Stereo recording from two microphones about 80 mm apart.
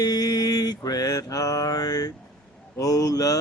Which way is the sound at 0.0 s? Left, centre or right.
Left.